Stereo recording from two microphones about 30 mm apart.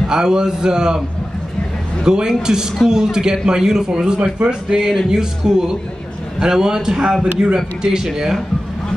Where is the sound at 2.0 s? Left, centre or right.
Right.